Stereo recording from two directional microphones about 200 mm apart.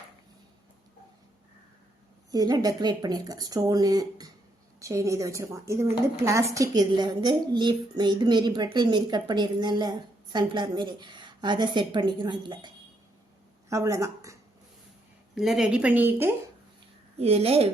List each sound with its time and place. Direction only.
2.3 s a woman's voice: 20° right (ahead or behind)
15.4 s a woman's voice: centre (ahead or behind)
17.2 s a woman's voice: 30° right (ahead or behind)